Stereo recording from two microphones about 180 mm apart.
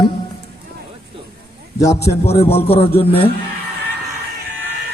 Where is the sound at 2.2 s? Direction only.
35° left (ahead or behind).